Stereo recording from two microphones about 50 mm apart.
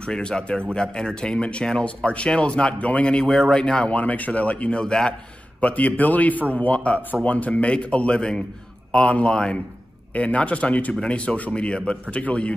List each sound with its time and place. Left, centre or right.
0.0 s speech: centre
3.3 s speech: centre
3.9 s speech: left; by 5.1 s centre
5.6 s a man's voice: left